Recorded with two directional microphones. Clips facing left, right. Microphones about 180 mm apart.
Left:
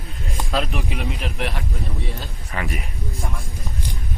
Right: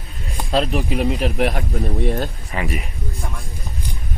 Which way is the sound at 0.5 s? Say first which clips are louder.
Right 6 dB; 35° right (ahead or behind).